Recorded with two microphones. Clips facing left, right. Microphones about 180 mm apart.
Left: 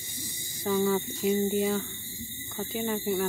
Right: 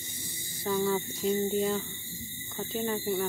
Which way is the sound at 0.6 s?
10° left (ahead or behind).